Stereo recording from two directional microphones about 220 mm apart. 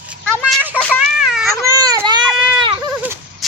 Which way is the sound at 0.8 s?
5° left (ahead or behind).